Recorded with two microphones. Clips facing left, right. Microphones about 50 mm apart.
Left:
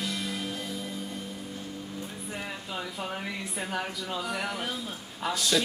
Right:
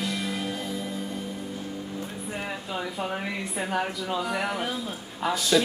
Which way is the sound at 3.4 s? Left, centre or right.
Centre.